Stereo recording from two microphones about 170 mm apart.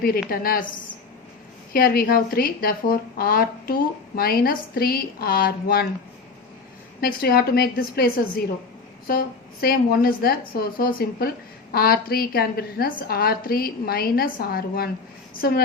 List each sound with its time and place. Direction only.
0.0 s speech: 60° left (ahead or behind)
1.7 s speech: 60° left (ahead or behind)
7.0 s speech: 60° left (ahead or behind)